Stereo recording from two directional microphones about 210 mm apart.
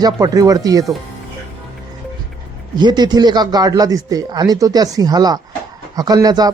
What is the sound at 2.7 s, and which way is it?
A man's voice, 20° right (ahead or behind).